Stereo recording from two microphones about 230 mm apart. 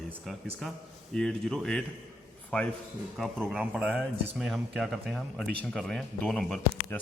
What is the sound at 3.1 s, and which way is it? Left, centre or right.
A man's voice, centre.